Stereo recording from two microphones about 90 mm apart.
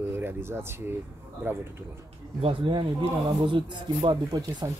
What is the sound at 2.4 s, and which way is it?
Speech, 70° right (ahead or behind).